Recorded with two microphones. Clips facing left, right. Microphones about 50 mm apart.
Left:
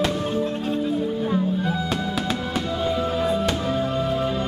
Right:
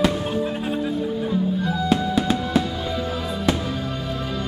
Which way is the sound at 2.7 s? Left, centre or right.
Centre.